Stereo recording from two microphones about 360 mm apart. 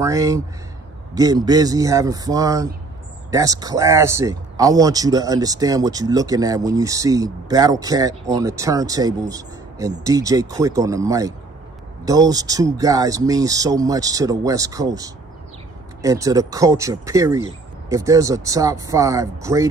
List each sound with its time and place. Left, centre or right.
0.0 s speech: centre